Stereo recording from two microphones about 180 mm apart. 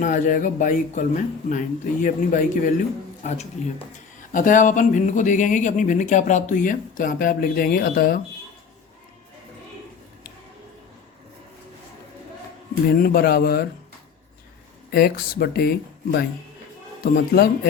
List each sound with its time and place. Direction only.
0.0 s speech: 45° left (ahead or behind)
12.9 s speech: 55° left (ahead or behind)
14.8 s speech: 60° left (ahead or behind)
17.0 s speech: 55° left (ahead or behind)